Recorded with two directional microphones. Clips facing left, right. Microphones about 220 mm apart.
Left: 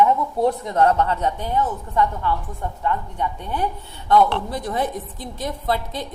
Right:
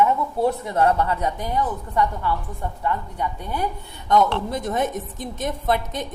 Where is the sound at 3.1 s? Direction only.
10° right (ahead or behind).